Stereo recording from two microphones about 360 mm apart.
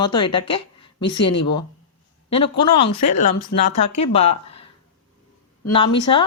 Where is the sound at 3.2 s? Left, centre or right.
Left.